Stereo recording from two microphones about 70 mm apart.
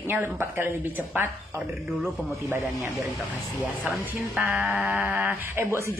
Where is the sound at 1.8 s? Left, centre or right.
Centre.